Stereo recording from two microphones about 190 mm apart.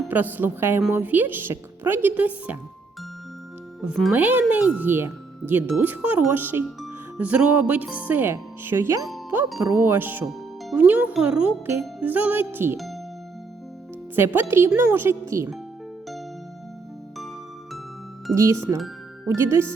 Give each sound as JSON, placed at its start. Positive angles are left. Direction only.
{"t": 0.1, "sound": "speech", "side_deg": -10}
{"t": 3.8, "sound": "speech", "side_deg": 0}
{"t": 12.7, "sound": "music", "side_deg": 0}
{"t": 14.2, "sound": "speech", "side_deg": -10}
{"t": 18.3, "sound": "speech", "side_deg": -15}